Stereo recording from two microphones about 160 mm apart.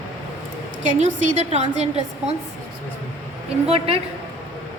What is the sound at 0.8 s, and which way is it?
Speech, 50° right (ahead or behind).